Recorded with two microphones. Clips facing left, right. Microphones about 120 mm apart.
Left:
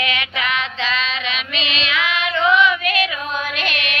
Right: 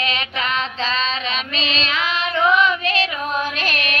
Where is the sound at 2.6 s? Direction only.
35° right (ahead or behind).